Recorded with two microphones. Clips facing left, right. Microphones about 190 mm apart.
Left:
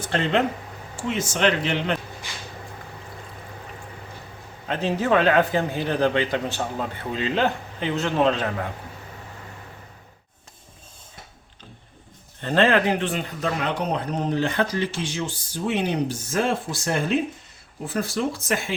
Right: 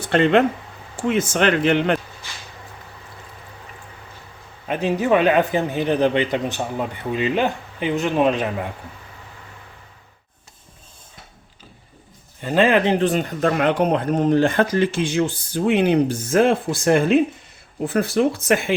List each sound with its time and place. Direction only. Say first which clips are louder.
0.1 s speech: right 7 dB; 60° right (ahead or behind)
4.7 s a man's voice: right 3 dB; 15° right (ahead or behind)
12.4 s a man's voice: right 2 dB; 10° right (ahead or behind)
12.8 s speech: right 5 dB; 25° right (ahead or behind)
13.1 s speech: right 7 dB; 45° right (ahead or behind); by 18.7 s 60° right (ahead or behind)